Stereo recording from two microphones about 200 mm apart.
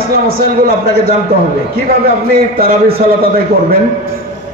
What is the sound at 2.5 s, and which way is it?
Speech, 50° right (ahead or behind).